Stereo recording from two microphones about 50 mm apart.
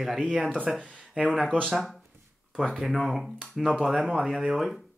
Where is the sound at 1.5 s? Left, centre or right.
Centre.